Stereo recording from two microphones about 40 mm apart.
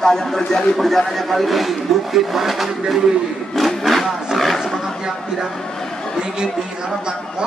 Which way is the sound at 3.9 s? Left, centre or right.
Centre.